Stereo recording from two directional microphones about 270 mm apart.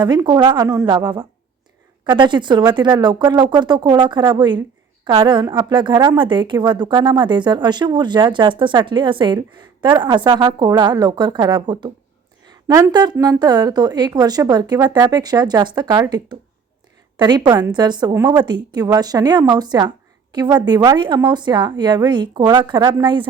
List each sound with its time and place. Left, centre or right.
0.0 s speech: centre